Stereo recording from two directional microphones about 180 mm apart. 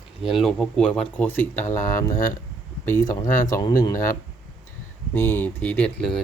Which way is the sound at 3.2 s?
15° left (ahead or behind).